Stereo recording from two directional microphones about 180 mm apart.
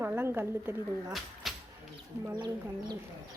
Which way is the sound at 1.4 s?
Centre (ahead or behind).